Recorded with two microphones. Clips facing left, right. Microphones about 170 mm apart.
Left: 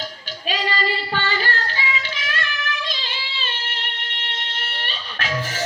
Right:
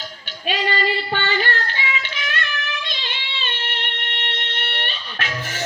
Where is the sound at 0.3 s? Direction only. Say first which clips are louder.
Right 2 dB; 35° left (ahead or behind).